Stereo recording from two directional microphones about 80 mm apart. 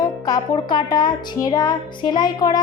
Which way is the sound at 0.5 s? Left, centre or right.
Left.